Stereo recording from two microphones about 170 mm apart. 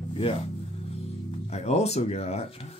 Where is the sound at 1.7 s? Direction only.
40° left (ahead or behind).